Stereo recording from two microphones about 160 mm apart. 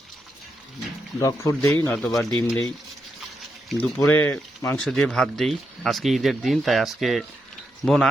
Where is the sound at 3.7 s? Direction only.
10° left (ahead or behind).